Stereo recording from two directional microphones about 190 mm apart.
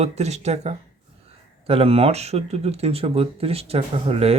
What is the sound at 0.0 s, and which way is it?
Speech, 35° right (ahead or behind).